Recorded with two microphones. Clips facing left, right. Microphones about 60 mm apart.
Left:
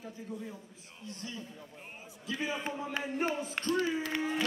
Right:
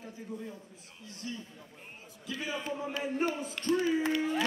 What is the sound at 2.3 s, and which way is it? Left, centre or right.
A man's voice, left.